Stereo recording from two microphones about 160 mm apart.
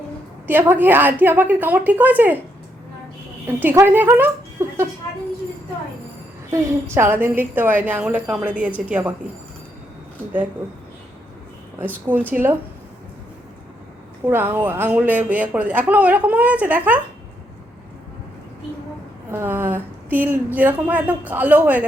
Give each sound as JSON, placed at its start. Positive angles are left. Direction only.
{"t": 0.4, "sound": "speech", "side_deg": -15}
{"t": 3.4, "sound": "speech", "side_deg": -15}
{"t": 6.5, "sound": "speech", "side_deg": -15}
{"t": 11.8, "sound": "speech", "side_deg": -15}
{"t": 14.3, "sound": "speech", "side_deg": -15}
{"t": 19.3, "sound": "speech", "side_deg": -15}